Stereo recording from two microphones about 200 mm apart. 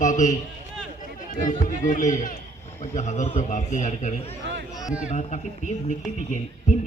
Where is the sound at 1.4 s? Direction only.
40° left (ahead or behind).